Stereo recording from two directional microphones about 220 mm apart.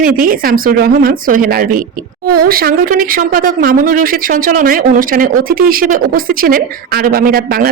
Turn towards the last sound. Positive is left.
turn(degrees=-40)  # may be behind; listen again after turning